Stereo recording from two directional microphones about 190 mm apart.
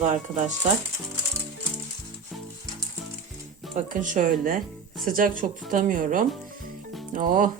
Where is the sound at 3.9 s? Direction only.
40° right (ahead or behind).